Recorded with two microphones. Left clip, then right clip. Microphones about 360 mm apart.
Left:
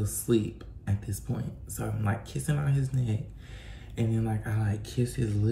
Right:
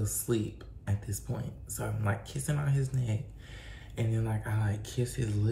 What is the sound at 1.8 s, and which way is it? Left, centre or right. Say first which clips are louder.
Speech: left 1 dB; centre.